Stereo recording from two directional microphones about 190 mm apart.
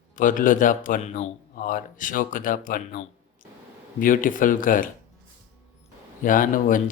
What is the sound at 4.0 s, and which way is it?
Speech, 45° left (ahead or behind).